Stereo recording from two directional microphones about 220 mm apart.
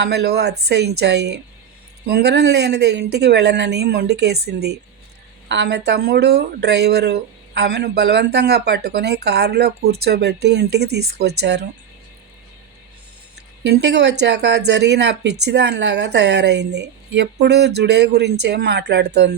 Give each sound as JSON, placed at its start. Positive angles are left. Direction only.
{"t": 0.0, "sound": "speech", "side_deg": -50}
{"t": 13.7, "sound": "speech", "side_deg": -50}